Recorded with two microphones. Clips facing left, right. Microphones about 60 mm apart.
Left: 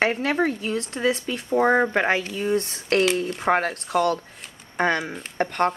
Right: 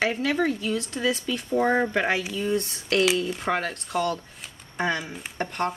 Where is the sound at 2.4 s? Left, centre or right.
Left.